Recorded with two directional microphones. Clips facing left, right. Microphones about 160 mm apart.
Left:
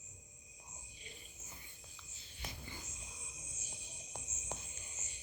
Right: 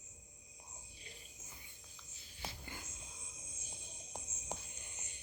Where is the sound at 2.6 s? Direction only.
55° right (ahead or behind).